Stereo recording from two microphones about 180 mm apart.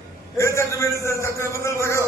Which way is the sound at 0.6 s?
15° left (ahead or behind).